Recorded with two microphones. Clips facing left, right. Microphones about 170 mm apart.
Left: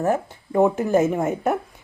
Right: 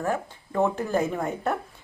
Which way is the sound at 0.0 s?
15° left (ahead or behind).